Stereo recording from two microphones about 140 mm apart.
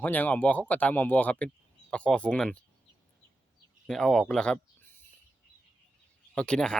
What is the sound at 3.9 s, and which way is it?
Speech, 5° left (ahead or behind).